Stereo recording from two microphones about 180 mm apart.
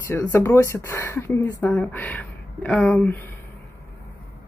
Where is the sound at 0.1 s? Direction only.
15° left (ahead or behind).